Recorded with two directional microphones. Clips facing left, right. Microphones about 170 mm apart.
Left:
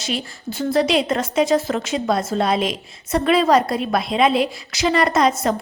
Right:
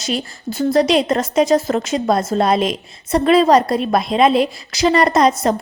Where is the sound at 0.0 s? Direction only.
40° right (ahead or behind).